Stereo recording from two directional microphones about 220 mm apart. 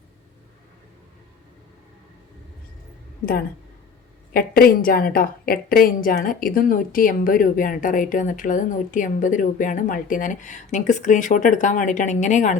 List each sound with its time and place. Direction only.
4.4 s a woman's voice: 40° left (ahead or behind)